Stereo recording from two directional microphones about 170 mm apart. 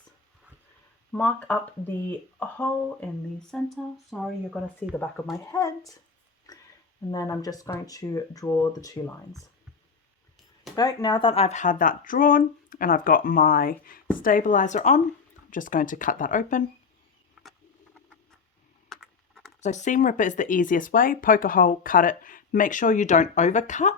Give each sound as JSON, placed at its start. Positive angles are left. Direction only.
{"t": 1.1, "sound": "speech", "side_deg": 10}
{"t": 4.9, "sound": "speech", "side_deg": 10}
{"t": 6.5, "sound": "a sound", "side_deg": 20}
{"t": 7.1, "sound": "speech", "side_deg": 20}
{"t": 10.8, "sound": "speech", "side_deg": 25}
{"t": 17.4, "sound": "a sound", "side_deg": -5}
{"t": 18.9, "sound": "typing", "side_deg": 0}
{"t": 19.6, "sound": "speech", "side_deg": 45}